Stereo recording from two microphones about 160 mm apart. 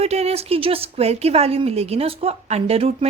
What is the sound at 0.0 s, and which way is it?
A woman's voice, 40° right (ahead or behind).